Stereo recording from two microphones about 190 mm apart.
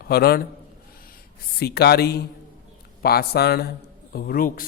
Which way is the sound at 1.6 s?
55° left (ahead or behind).